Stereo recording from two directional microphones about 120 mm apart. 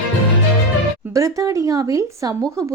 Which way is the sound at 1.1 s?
25° right (ahead or behind).